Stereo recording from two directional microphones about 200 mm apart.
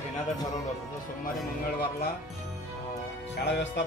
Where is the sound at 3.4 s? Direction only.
60° left (ahead or behind).